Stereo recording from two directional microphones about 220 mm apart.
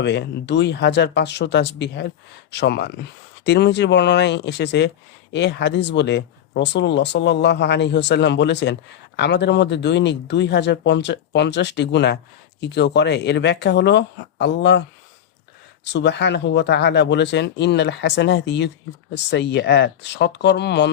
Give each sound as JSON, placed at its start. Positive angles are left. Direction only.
{"t": 0.0, "sound": "speech", "side_deg": 50}